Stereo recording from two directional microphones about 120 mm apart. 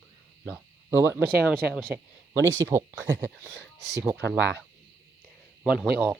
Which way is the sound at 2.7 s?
20° right (ahead or behind).